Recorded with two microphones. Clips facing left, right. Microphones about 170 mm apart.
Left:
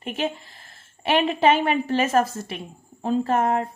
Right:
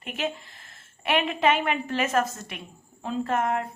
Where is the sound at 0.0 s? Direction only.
30° left (ahead or behind).